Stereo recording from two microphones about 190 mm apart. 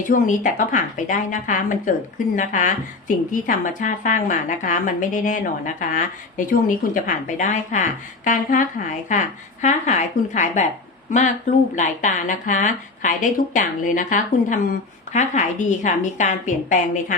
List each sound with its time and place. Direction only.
0.0 s a woman's voice: 40° left (ahead or behind)
11.8 s a woman's voice: 40° left (ahead or behind)